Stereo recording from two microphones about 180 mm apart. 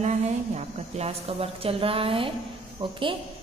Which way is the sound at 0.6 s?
35° right (ahead or behind).